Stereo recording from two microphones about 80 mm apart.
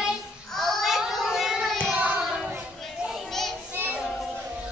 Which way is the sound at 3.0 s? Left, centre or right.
Centre.